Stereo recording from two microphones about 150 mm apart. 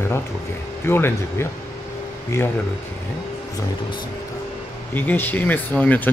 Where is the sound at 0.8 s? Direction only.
15° left (ahead or behind).